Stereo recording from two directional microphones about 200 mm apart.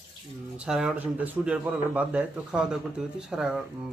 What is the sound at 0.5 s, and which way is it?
Speech, 5° right (ahead or behind).